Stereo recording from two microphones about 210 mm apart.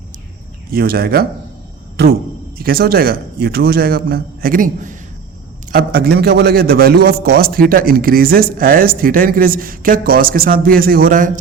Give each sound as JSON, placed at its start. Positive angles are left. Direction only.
{"t": 0.7, "sound": "a man's voice", "side_deg": -45}